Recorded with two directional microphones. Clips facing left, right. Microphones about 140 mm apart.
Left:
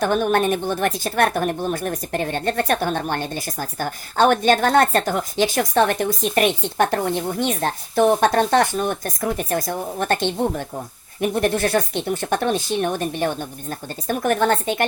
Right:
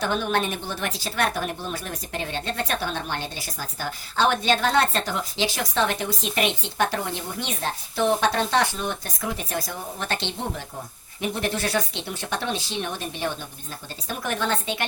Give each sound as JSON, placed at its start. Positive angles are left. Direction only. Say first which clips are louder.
{"t": 0.0, "sound": "a woman's voice", "louder": "left 6 dB", "side_deg": 50}